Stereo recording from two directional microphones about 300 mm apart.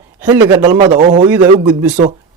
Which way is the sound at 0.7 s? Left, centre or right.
Right.